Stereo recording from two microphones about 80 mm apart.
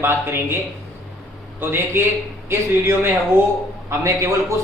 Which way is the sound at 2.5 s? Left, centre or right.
Right.